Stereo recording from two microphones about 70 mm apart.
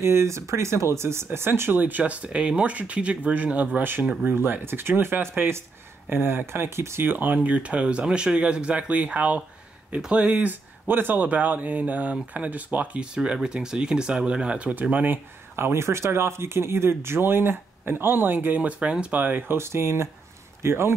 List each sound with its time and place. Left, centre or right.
0.0 s speech: right
4.0 s speech: centre
4.3 s speech: right
7.1 s speech: right
19.5 s speech: right